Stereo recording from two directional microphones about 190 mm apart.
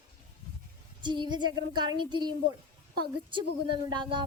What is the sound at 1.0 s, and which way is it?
Speech, 25° right (ahead or behind).